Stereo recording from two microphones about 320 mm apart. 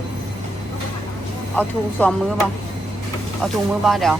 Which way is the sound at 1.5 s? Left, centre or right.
Centre.